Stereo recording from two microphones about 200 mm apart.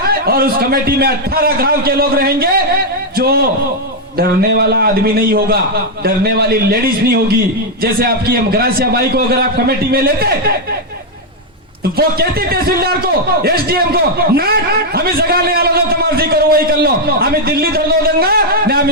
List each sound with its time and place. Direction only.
0.1 s a man's voice: 50° right (ahead or behind)
11.9 s a man's voice: 50° right (ahead or behind)